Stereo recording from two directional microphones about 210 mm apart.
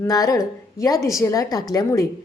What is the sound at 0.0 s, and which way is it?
A woman's voice, 15° left (ahead or behind).